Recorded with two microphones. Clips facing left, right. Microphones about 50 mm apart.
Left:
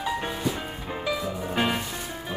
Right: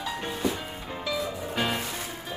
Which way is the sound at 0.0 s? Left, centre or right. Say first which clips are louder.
Left 2 dB; centre.